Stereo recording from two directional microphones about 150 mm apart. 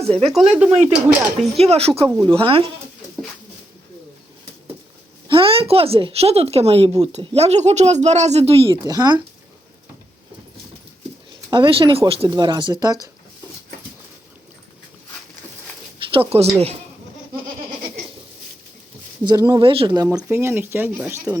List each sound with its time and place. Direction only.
0.3 s speech: 5° right (ahead or behind)
1.5 s speech: 45° right (ahead or behind)
5.3 s a woman's voice: 35° right (ahead or behind)
8.7 s speech: 25° right (ahead or behind)
11.5 s speech: 35° right (ahead or behind)
16.0 s a sound: 35° right (ahead or behind)
16.3 s speech: 45° right (ahead or behind)
19.2 s speech: 25° right (ahead or behind)
20.0 s speech: 25° right (ahead or behind)